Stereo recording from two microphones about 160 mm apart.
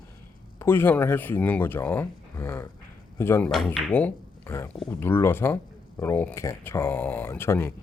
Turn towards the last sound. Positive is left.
turn(degrees=15)  # may be behind; listen again after turning